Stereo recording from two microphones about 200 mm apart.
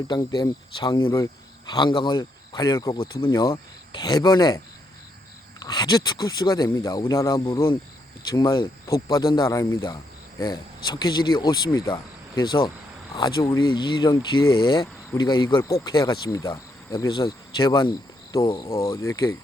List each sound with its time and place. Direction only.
0.1 s speech: 25° left (ahead or behind)
11.0 s speech: 20° left (ahead or behind)
14.3 s speech: 90° left
14.6 s speech: 20° left (ahead or behind)